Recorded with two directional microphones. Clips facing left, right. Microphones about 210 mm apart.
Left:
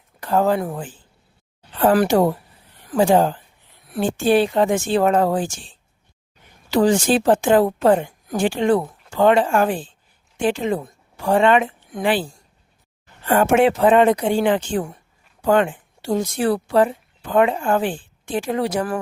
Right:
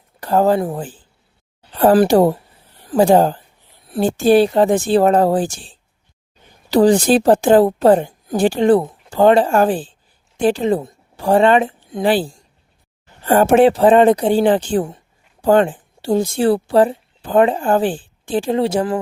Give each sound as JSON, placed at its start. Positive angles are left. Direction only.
{"t": 0.2, "sound": "a woman's voice", "side_deg": -35}